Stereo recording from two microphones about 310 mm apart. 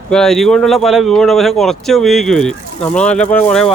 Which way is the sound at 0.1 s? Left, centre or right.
Centre.